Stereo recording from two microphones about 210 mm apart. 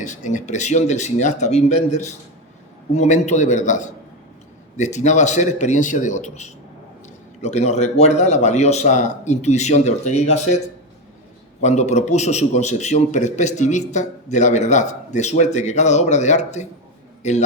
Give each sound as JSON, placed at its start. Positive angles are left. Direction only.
{"t": 0.0, "sound": "a man's voice", "side_deg": 35}
{"t": 11.6, "sound": "a man's voice", "side_deg": 35}